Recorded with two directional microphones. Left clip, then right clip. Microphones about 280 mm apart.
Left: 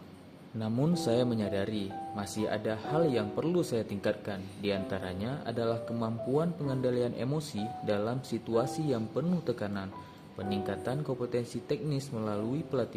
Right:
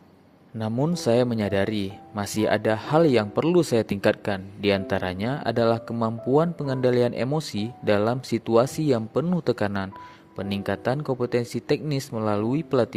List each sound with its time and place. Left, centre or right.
0.6 s speech: right